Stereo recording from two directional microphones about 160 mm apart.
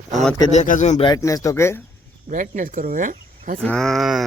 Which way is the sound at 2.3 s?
55° right (ahead or behind).